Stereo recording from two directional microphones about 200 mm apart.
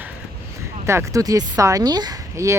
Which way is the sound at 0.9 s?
15° right (ahead or behind).